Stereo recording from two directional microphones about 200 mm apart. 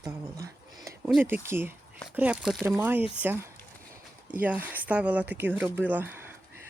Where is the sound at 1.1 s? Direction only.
10° right (ahead or behind).